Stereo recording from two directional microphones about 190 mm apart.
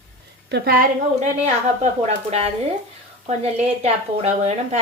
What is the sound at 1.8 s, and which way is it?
Speech, 35° right (ahead or behind).